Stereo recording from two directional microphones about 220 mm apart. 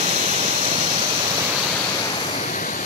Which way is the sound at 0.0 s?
30° right (ahead or behind).